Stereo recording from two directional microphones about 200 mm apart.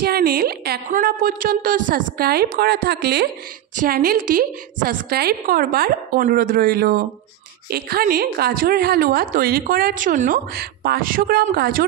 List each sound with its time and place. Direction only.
0.0 s a woman's voice: 50° right (ahead or behind)